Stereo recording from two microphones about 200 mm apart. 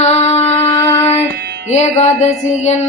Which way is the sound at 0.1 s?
30° left (ahead or behind).